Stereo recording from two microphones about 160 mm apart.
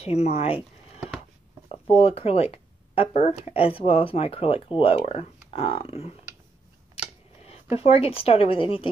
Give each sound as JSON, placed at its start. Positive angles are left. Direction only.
{"t": 0.0, "sound": "speech", "side_deg": 40}
{"t": 0.6, "sound": "a sound", "side_deg": -5}
{"t": 1.7, "sound": "speech", "side_deg": 40}
{"t": 7.7, "sound": "speech", "side_deg": 40}